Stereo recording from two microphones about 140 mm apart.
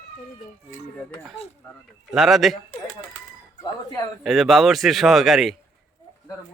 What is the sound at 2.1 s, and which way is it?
Speech, centre (ahead or behind).